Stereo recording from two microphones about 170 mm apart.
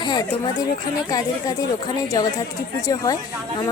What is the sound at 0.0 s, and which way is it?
Speech, 25° left (ahead or behind).